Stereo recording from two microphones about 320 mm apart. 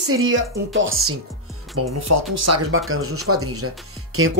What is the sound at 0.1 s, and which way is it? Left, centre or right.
Speech, right.